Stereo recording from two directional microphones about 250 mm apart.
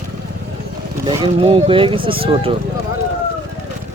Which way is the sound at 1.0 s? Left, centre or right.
Centre.